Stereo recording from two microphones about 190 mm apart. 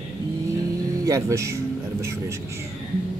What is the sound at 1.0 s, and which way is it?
Music, 15° right (ahead or behind).